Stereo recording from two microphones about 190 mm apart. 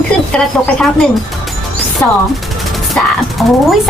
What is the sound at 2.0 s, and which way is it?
Speech, 15° left (ahead or behind).